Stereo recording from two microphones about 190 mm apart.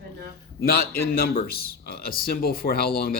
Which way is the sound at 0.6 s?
55° left (ahead or behind).